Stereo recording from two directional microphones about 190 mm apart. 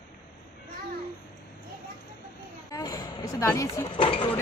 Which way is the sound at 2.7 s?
20° left (ahead or behind).